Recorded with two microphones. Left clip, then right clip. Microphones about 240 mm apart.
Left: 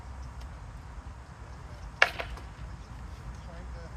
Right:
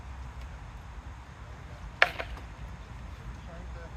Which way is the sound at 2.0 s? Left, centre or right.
Centre.